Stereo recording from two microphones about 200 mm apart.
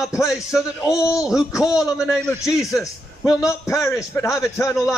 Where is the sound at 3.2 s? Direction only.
15° left (ahead or behind).